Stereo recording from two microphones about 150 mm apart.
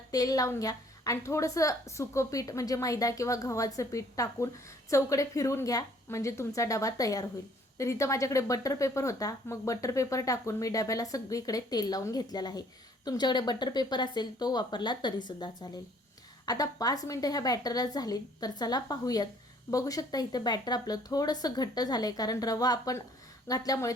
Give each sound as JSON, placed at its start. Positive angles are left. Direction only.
{"t": 0.1, "sound": "speech", "side_deg": 25}